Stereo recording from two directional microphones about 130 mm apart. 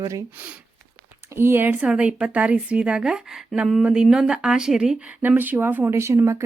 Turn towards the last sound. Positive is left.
turn(degrees=-20)  # may be behind; listen again after turning